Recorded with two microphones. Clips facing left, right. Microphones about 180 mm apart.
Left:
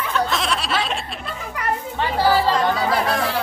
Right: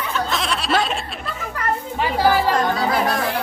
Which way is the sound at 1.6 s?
15° left (ahead or behind).